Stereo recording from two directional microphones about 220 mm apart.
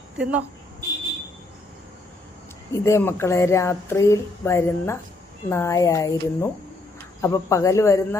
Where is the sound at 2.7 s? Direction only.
10° left (ahead or behind).